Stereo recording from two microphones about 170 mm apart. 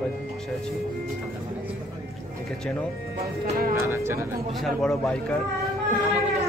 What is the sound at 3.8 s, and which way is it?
Speech, 15° right (ahead or behind).